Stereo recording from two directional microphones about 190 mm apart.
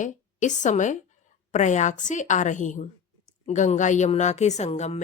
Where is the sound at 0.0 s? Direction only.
40° left (ahead or behind).